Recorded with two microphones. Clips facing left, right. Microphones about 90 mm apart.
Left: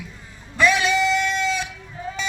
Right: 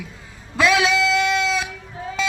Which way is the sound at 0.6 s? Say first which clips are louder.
Right 1 dB; 90° right.